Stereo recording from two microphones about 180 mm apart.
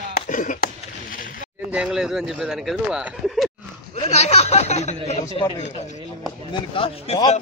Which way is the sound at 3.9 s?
35° left (ahead or behind).